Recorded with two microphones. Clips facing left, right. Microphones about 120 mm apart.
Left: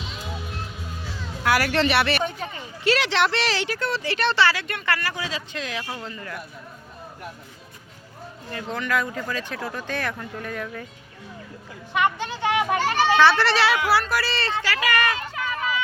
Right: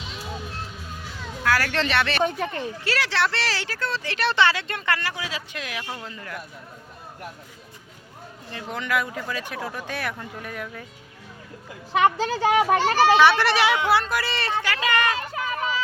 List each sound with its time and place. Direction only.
1.5 s speech: 15° left (ahead or behind)
2.4 s speech: 65° right (ahead or behind)
2.8 s speech: 20° left (ahead or behind)
4.4 s speech: 20° right (ahead or behind)
5.2 s a man's voice: 10° right (ahead or behind)
8.5 s speech: 15° right (ahead or behind)
11.9 s a child's voice: 35° right (ahead or behind)
13.1 s speech: 15° right (ahead or behind)
15.3 s run: 35° right (ahead or behind)